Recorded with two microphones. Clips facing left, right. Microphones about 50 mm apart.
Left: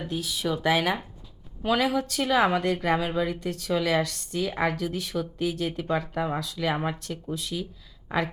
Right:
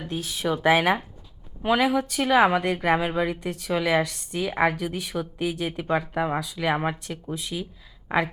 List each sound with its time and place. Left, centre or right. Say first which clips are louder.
0.3 s a woman's voice: right 5 dB; centre